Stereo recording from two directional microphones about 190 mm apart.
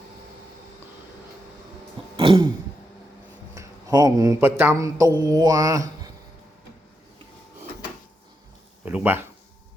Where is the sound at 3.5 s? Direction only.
15° right (ahead or behind).